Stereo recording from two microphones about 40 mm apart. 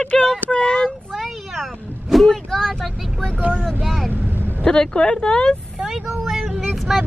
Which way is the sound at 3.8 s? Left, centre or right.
Centre.